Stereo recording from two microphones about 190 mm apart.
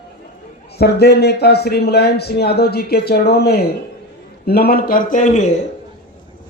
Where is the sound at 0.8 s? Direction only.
60° left (ahead or behind); by 5.4 s 40° left (ahead or behind).